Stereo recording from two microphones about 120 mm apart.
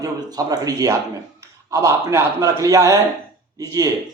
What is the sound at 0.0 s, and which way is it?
A man's voice, 30° right (ahead or behind).